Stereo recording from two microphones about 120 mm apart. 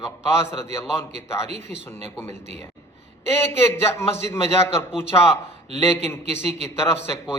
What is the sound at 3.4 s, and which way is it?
A man's voice, 20° left (ahead or behind).